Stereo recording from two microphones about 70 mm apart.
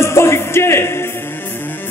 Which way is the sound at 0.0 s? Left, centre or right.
Left.